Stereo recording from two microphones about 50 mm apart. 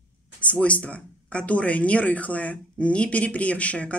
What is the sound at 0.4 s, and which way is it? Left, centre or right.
Speech, left.